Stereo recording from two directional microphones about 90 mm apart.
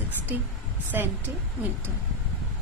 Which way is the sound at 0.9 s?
25° right (ahead or behind).